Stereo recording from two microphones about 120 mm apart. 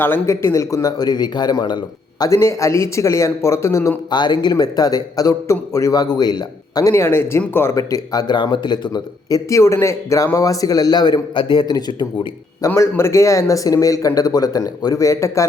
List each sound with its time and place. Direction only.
0.0 s a man's voice: 20° left (ahead or behind)
4.1 s a man's voice: 40° left (ahead or behind)
12.7 s a man's voice: 20° left (ahead or behind)